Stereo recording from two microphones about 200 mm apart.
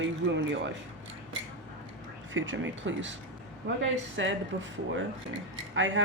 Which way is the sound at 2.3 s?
70° right (ahead or behind).